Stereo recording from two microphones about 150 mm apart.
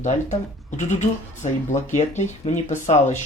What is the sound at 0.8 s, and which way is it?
Speech, 55° left (ahead or behind).